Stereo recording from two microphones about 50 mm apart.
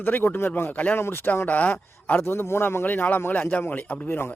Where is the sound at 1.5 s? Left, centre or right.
Left.